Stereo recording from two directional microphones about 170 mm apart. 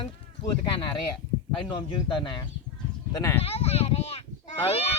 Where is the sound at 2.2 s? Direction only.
25° left (ahead or behind).